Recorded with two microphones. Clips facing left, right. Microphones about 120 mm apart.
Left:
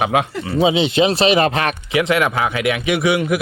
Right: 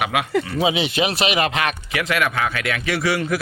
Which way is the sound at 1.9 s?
20° left (ahead or behind).